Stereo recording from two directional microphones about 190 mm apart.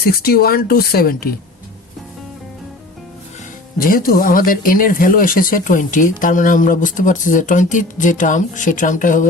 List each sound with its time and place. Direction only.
0.0 s speech: 55° left (ahead or behind)
3.8 s speech: 50° left (ahead or behind)